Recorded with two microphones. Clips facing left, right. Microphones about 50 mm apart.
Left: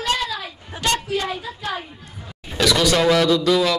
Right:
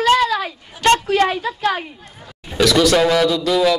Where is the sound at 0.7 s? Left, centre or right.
Left.